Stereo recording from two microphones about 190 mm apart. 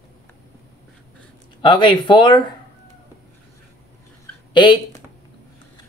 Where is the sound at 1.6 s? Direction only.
25° left (ahead or behind).